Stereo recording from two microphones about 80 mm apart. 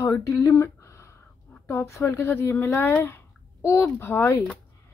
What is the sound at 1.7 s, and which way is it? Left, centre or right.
Speech, left.